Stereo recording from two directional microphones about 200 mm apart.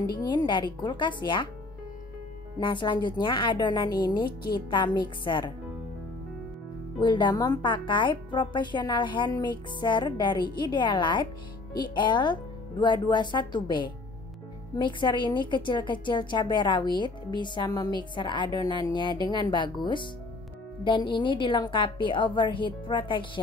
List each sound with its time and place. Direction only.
0.0 s a woman's voice: 20° left (ahead or behind)
2.6 s a woman's voice: 25° left (ahead or behind)
7.0 s a woman's voice: 20° left (ahead or behind)